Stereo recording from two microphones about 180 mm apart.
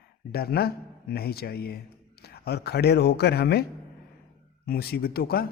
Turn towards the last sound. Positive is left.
turn(degrees=60)  # may be behind; listen again after turning